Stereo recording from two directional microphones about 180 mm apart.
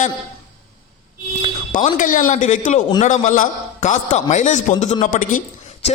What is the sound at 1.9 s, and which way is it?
A man's voice, 45° left (ahead or behind).